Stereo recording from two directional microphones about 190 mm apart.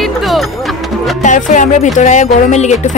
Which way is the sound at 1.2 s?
40° left (ahead or behind).